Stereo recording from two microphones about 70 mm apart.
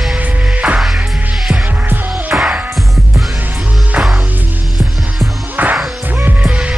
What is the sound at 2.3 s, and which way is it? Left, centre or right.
Music, centre.